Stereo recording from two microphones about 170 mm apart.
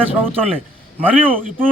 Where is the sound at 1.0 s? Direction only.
10° right (ahead or behind).